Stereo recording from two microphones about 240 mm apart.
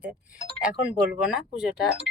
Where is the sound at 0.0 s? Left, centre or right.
Centre.